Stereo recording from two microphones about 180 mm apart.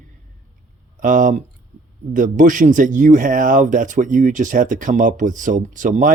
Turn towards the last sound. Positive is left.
turn(degrees=-45)  # may be behind; listen again after turning